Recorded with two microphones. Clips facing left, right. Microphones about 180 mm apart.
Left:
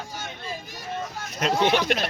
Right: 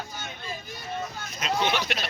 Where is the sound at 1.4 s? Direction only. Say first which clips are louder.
Left 5 dB; 55° left (ahead or behind).